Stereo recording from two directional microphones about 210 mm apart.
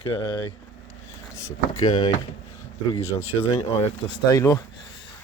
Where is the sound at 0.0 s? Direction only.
20° left (ahead or behind).